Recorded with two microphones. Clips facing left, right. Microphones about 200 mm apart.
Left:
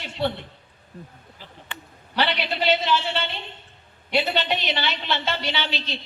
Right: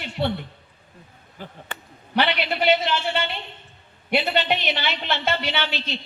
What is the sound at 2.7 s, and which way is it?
A woman's voice, 50° right (ahead or behind).